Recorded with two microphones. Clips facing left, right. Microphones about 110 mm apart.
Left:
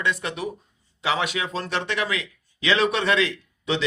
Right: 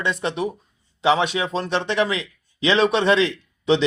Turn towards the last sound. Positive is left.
turn(degrees=-25)  # may be behind; listen again after turning